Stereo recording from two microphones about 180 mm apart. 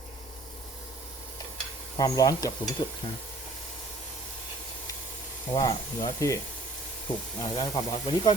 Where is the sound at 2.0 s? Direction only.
20° left (ahead or behind).